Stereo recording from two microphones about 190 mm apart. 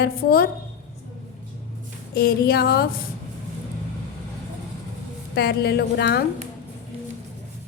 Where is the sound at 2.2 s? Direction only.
55° left (ahead or behind).